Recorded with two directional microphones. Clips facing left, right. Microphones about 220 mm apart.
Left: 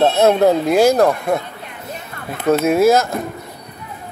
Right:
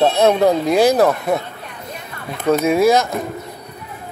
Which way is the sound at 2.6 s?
Centre (ahead or behind).